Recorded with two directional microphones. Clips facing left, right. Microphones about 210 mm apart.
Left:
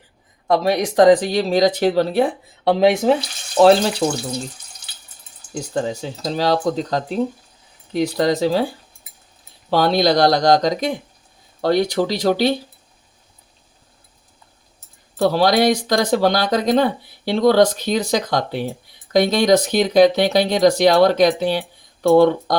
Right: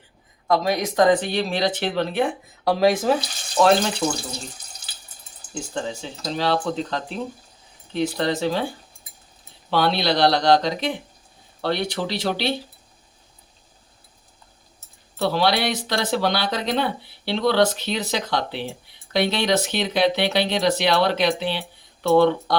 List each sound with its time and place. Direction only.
0.9 s speech: 35° left (ahead or behind)
2.6 s speech: 20° left (ahead or behind)
3.6 s speech: 30° left (ahead or behind)
5.5 s speech: 40° left (ahead or behind)
9.6 s speech: 40° left (ahead or behind)
15.2 s speech: 45° left (ahead or behind)